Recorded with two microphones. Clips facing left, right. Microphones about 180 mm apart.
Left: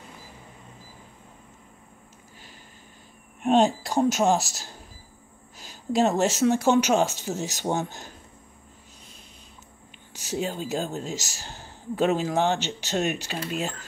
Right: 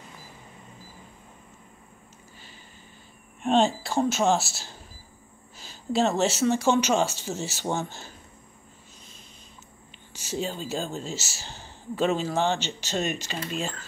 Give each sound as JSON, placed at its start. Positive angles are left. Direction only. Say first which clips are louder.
{"t": 3.4, "sound": "speech", "louder": "left 2 dB", "side_deg": 10}
{"t": 5.7, "sound": "speech", "louder": "left 2 dB", "side_deg": 10}
{"t": 10.3, "sound": "speech", "louder": "left 2 dB", "side_deg": 10}